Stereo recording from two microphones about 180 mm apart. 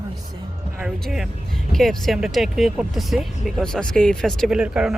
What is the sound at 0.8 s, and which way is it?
Speech, centre (ahead or behind).